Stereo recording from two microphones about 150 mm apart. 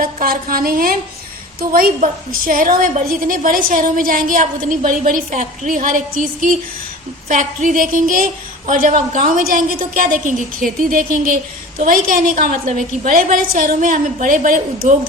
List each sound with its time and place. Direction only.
0.0 s a woman's voice: 70° right (ahead or behind)
2.0 s a woman's voice: 65° right (ahead or behind)
11.8 s a woman's voice: 65° right (ahead or behind)